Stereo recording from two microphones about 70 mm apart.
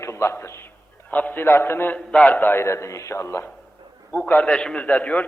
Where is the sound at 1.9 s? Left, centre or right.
Centre.